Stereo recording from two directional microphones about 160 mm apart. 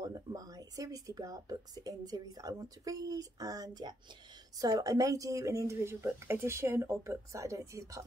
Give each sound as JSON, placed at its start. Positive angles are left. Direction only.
{"t": 0.0, "sound": "speech", "side_deg": -20}